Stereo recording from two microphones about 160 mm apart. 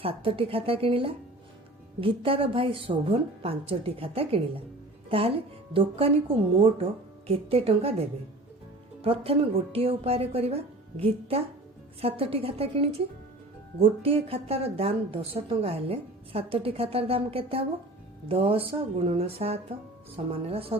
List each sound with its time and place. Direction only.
0.0 s a woman's voice: 35° right (ahead or behind)
14.0 s a woman's voice: 35° right (ahead or behind)